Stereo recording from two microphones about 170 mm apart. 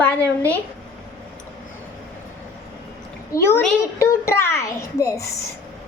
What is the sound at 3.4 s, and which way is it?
A child's voice, 15° left (ahead or behind).